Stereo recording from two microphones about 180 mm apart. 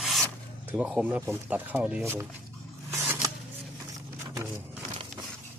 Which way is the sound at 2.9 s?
15° right (ahead or behind).